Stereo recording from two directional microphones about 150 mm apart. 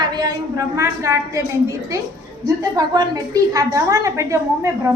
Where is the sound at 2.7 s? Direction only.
25° right (ahead or behind).